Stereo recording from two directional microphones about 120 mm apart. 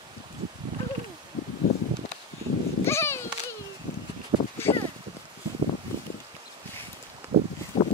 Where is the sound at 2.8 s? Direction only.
20° left (ahead or behind).